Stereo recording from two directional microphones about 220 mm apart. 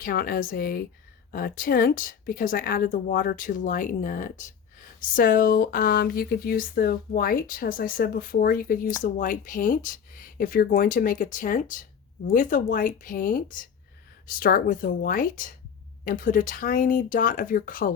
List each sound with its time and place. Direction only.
0.0 s speech: 40° left (ahead or behind)